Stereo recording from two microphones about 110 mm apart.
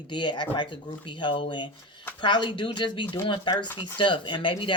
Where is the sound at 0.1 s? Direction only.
45° left (ahead or behind).